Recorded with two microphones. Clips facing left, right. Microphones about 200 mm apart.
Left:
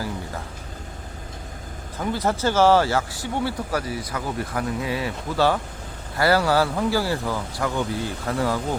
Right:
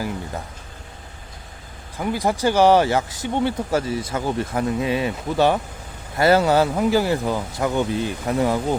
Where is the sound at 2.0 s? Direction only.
10° right (ahead or behind).